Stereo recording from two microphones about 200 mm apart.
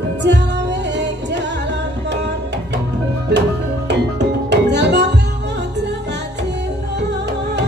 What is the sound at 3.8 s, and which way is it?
Music, 60° right (ahead or behind).